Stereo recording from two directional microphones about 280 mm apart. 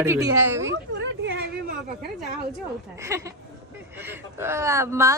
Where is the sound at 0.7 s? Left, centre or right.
Right.